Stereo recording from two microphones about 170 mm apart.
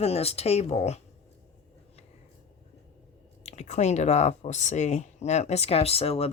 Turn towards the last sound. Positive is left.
turn(degrees=35)  # may be behind; listen again after turning